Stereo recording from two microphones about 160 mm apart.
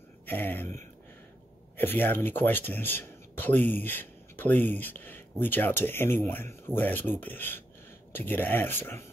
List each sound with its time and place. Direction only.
0.3 s speech: 10° left (ahead or behind)